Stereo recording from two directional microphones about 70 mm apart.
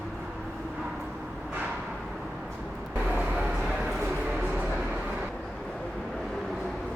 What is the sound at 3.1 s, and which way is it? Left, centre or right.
Train, right.